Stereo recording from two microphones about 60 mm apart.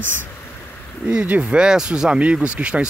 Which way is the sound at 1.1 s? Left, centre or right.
Right.